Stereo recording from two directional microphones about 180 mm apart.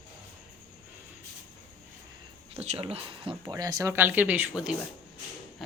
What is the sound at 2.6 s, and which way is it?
Speech, 35° right (ahead or behind).